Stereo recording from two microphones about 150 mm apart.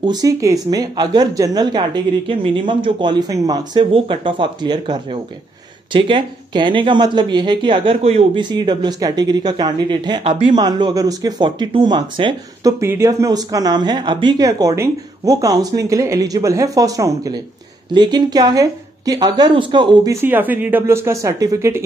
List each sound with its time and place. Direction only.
0.0 s speech: 25° right (ahead or behind); by 8.3 s 45° right (ahead or behind)
8.4 s speech: 30° right (ahead or behind)
10.2 s speech: 45° right (ahead or behind)
10.5 s speech: 30° right (ahead or behind)
12.8 s speech: 20° right (ahead or behind)
20.2 s speech: 10° right (ahead or behind)